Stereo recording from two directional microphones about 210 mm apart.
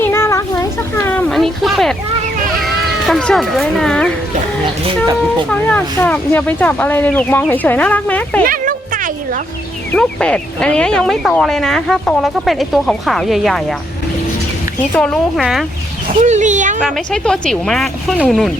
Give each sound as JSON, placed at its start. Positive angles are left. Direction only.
{"t": 0.0, "sound": "cat", "side_deg": 10}
{"t": 3.1, "sound": "speech", "side_deg": 0}
{"t": 5.5, "sound": "speech", "side_deg": 10}
{"t": 8.4, "sound": "music", "side_deg": -40}
{"t": 9.9, "sound": "speech", "side_deg": 5}
{"t": 14.9, "sound": "speech", "side_deg": 5}
{"t": 16.0, "sound": "speech", "side_deg": -35}
{"t": 16.8, "sound": "speech", "side_deg": 5}